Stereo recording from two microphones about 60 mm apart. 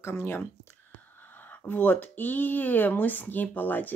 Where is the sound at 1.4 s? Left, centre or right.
Left.